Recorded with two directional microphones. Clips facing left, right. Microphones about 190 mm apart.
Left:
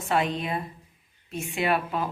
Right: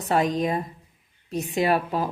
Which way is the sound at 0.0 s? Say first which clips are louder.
Right 4 dB; 40° right (ahead or behind).